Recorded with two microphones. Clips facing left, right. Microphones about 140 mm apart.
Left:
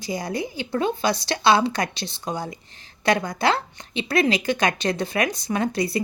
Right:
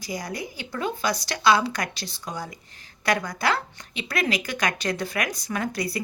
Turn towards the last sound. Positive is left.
turn(degrees=25)  # may be behind; listen again after turning